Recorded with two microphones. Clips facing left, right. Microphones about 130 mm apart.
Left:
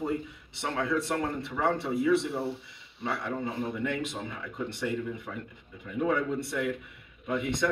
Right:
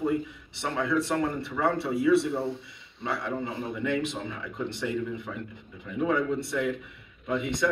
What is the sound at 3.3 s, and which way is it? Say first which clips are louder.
Speech: even; 20° right (ahead or behind).